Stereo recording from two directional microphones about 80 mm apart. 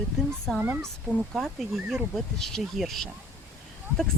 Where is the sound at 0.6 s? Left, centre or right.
Right.